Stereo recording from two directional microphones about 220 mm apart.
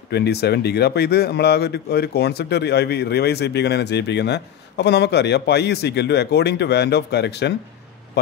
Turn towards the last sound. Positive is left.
turn(degrees=50)  # may be behind; listen again after turning